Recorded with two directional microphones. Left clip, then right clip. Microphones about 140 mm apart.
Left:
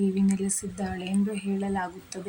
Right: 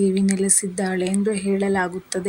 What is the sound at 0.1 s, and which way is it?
Speech, 35° right (ahead or behind).